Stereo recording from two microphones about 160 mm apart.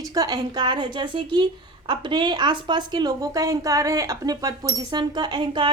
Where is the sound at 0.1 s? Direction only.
25° right (ahead or behind).